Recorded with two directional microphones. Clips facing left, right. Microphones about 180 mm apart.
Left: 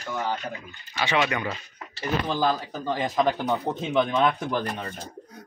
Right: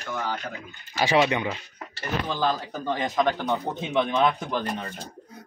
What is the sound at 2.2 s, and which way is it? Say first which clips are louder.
Speech: even; 10° left (ahead or behind).